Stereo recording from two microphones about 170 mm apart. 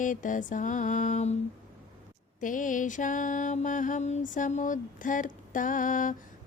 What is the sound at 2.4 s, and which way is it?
Mantra, 50° left (ahead or behind).